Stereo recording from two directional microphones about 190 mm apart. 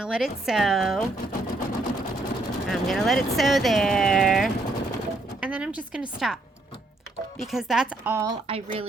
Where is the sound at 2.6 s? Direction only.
Centre (ahead or behind).